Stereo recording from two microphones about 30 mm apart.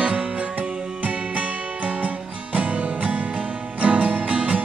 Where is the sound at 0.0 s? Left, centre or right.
Right.